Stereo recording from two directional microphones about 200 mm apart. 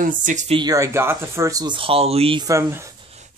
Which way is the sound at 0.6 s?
15° right (ahead or behind).